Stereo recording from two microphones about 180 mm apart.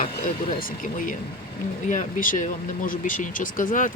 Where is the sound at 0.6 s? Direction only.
50° left (ahead or behind).